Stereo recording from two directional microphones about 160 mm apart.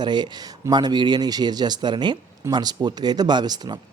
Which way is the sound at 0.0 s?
25° right (ahead or behind).